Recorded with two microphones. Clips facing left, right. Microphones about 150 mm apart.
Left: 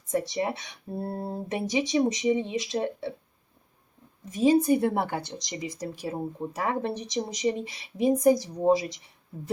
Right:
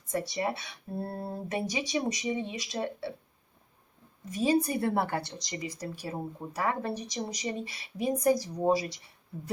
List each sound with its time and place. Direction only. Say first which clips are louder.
0.1 s speech: left 3 dB; 20° left (ahead or behind)
4.3 s speech: left 6 dB; 20° left (ahead or behind)